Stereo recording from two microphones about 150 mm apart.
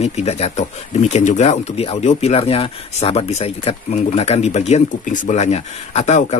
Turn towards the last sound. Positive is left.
turn(degrees=50)  # may be behind; listen again after turning